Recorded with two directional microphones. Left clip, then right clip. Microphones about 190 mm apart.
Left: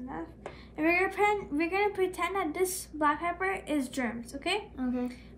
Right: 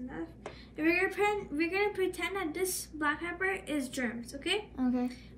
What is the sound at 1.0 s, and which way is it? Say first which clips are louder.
Speech: left 4 dB; 15° right (ahead or behind).